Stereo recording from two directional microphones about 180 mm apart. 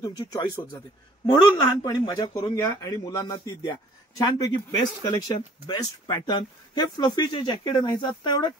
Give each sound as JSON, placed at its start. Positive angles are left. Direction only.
{"t": 0.0, "sound": "speech", "side_deg": 25}